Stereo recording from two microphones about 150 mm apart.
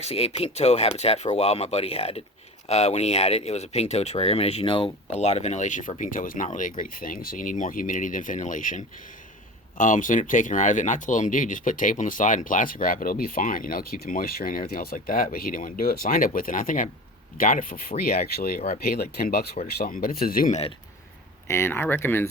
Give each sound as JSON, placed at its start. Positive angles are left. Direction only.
{"t": 0.0, "sound": "speech", "side_deg": 40}
{"t": 6.0, "sound": "speech", "side_deg": 65}
{"t": 19.8, "sound": "speech", "side_deg": 80}
{"t": 21.4, "sound": "speech", "side_deg": 15}